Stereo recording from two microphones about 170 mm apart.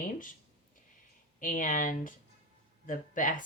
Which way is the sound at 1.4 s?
50° left (ahead or behind).